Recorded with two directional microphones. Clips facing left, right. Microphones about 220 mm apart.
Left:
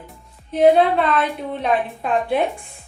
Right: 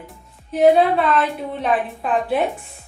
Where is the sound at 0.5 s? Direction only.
5° right (ahead or behind).